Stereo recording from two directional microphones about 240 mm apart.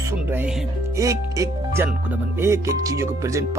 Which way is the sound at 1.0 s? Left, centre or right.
Centre.